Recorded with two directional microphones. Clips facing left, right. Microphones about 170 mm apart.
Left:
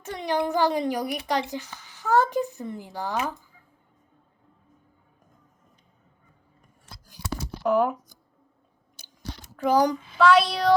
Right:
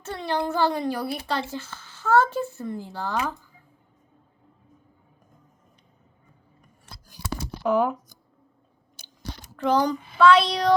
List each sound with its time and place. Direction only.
0.0 s a child's voice: 15° left (ahead or behind)
7.6 s speech: centre (ahead or behind)
9.6 s speech: 10° left (ahead or behind)